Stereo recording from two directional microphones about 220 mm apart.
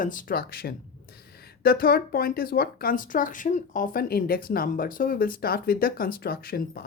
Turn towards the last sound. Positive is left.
turn(degrees=45)  # may be behind; listen again after turning